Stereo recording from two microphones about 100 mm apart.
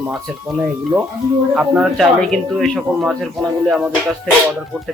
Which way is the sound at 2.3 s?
5° left (ahead or behind).